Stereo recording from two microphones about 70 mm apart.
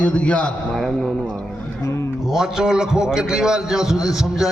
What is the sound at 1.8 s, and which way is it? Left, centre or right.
Music, left.